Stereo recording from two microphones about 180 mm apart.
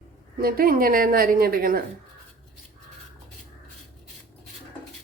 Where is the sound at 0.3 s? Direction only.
55° right (ahead or behind).